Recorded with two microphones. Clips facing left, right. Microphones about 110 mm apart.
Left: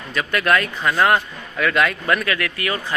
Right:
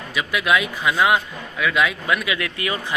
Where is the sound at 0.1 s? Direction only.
5° right (ahead or behind).